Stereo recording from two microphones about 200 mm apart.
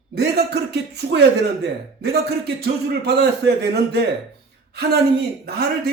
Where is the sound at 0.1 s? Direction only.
55° right (ahead or behind).